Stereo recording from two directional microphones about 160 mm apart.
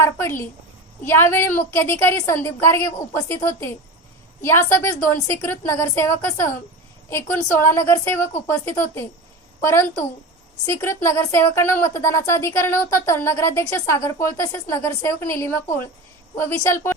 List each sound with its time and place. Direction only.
0.0 s speech: 15° left (ahead or behind)
10.8 s speech: 15° left (ahead or behind)